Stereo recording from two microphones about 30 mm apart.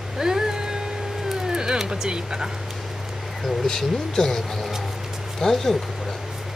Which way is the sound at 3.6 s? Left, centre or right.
Centre.